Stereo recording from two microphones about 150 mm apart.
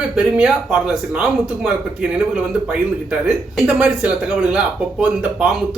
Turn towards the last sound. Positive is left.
turn(degrees=-5)  # may be behind; listen again after turning